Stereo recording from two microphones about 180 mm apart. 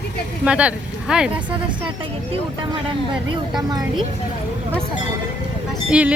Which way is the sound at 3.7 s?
20° right (ahead or behind).